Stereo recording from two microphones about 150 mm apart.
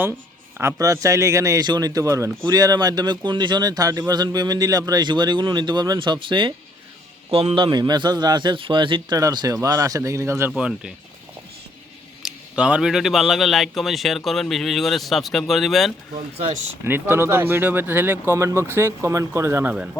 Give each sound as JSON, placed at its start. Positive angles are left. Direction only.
{"t": 0.6, "sound": "speech", "side_deg": -20}
{"t": 10.5, "sound": "speech", "side_deg": -5}
{"t": 12.2, "sound": "speech", "side_deg": -5}
{"t": 16.8, "sound": "speech", "side_deg": -15}